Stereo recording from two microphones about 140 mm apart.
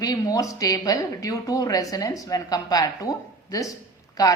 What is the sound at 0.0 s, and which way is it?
Speech, 25° left (ahead or behind).